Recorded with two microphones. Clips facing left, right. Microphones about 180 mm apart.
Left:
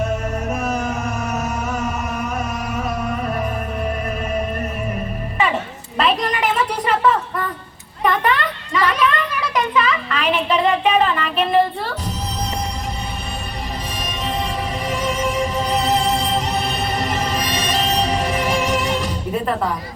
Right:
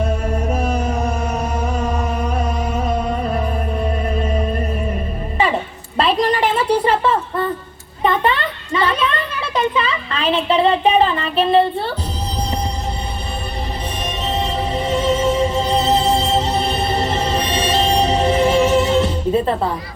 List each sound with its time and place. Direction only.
0.0 s music: 30° right (ahead or behind)
6.0 s a sound: 30° right (ahead or behind)
14.3 s music: 25° right (ahead or behind)